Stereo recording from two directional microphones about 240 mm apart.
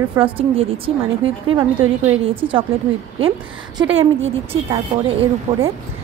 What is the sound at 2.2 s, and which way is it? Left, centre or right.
Speech, right.